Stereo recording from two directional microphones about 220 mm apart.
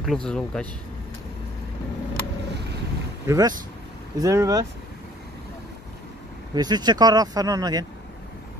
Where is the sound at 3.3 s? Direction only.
15° right (ahead or behind).